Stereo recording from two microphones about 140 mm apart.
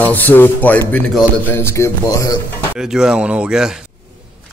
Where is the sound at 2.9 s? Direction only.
5° right (ahead or behind).